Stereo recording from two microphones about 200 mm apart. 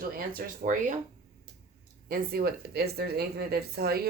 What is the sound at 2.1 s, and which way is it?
Speech, 50° right (ahead or behind).